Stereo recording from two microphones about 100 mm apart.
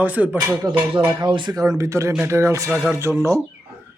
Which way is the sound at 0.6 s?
50° right (ahead or behind).